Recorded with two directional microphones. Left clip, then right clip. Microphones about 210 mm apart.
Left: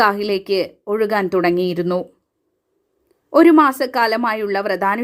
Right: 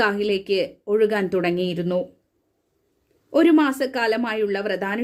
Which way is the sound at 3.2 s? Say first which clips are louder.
Left 6 dB; 15° left (ahead or behind).